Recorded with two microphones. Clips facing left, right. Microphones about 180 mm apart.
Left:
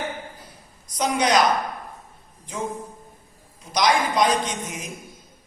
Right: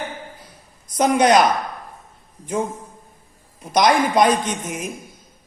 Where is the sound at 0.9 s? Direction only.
55° right (ahead or behind).